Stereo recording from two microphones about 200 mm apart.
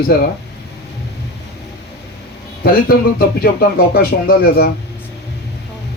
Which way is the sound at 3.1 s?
50° left (ahead or behind).